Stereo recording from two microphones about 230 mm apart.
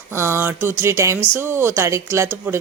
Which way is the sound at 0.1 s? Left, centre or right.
Centre.